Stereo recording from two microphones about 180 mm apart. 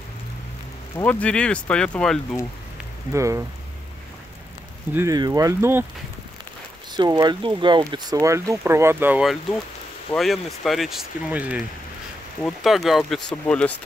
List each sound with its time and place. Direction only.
0.9 s speech: 5° left (ahead or behind)
3.1 s speech: 15° right (ahead or behind)
4.9 s speech: 20° right (ahead or behind)
6.9 s speech: 20° right (ahead or behind); by 13.7 s 5° left (ahead or behind)